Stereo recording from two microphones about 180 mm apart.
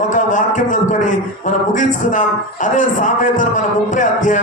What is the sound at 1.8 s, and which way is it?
A man's voice, 45° left (ahead or behind).